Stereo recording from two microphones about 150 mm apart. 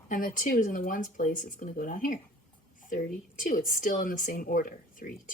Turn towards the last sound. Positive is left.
turn(degrees=70)  # may be behind; listen again after turning